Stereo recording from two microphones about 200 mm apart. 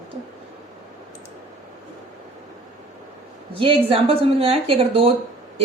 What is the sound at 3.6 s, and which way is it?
Speech, 25° right (ahead or behind).